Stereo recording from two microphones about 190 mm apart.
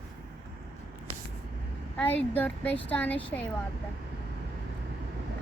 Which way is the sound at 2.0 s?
10° left (ahead or behind).